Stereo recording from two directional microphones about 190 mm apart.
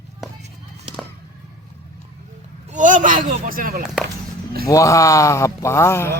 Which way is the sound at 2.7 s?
40° right (ahead or behind).